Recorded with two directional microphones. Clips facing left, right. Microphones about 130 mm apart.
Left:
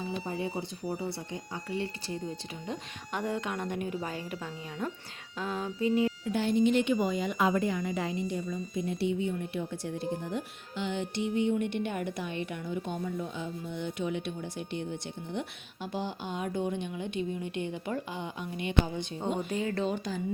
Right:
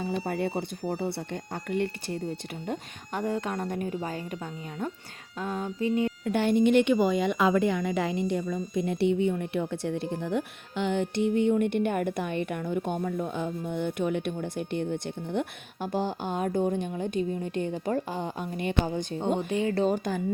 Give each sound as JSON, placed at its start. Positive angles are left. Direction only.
{"t": 0.3, "sound": "speech", "side_deg": -65}
{"t": 0.5, "sound": "speech", "side_deg": -50}
{"t": 2.6, "sound": "speech", "side_deg": -40}
{"t": 5.4, "sound": "music", "side_deg": -25}
{"t": 5.8, "sound": "a woman's voice", "side_deg": 30}
{"t": 6.2, "sound": "a woman's voice", "side_deg": -60}
{"t": 19.5, "sound": "music", "side_deg": -30}
{"t": 19.8, "sound": "a woman's voice", "side_deg": -45}